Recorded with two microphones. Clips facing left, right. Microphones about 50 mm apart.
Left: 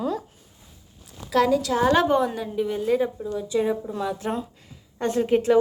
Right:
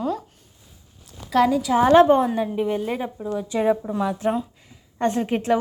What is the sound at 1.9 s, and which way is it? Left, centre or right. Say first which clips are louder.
A woman's voice: right 6 dB; right.